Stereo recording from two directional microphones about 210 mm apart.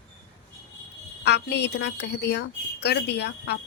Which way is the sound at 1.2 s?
50° left (ahead or behind).